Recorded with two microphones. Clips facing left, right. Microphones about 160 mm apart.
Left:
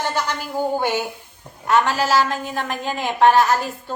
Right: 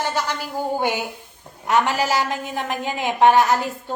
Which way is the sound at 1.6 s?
15° right (ahead or behind).